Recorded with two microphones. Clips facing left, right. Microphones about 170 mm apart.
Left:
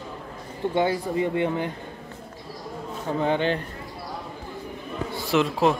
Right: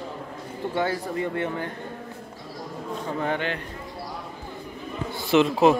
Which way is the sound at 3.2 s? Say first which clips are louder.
Left 6 dB; 30° left (ahead or behind).